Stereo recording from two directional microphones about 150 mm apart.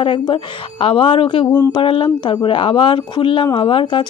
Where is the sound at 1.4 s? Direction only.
15° left (ahead or behind).